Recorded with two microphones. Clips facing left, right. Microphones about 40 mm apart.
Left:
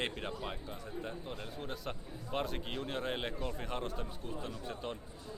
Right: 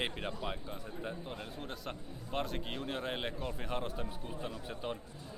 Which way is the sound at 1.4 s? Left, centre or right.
Centre.